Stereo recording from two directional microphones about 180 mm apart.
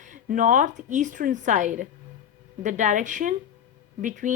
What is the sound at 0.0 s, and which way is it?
Speech, 45° right (ahead or behind).